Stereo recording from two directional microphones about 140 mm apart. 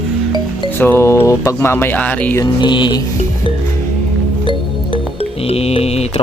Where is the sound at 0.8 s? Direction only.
15° left (ahead or behind).